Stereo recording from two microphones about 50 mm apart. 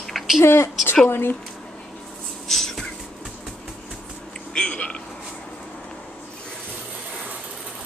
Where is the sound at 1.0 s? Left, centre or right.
Left.